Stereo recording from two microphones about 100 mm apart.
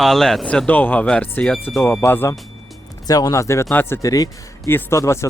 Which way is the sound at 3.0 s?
40° left (ahead or behind).